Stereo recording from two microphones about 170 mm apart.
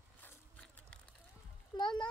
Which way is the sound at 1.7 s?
25° left (ahead or behind).